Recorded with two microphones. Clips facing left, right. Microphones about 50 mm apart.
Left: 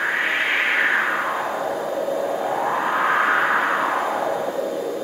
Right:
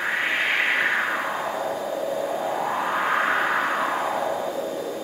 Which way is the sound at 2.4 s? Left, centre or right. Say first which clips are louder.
Left 3 dB; centre.